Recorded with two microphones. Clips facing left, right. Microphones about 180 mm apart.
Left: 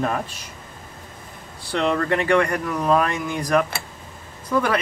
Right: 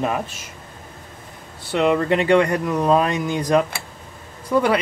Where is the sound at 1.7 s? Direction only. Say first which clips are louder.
Right 4 dB; 5° right (ahead or behind).